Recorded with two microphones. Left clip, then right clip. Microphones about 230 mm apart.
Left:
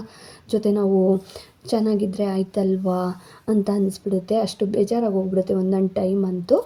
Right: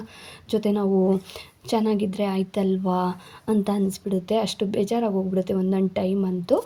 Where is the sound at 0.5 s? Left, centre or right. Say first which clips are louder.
Left 3 dB; centre.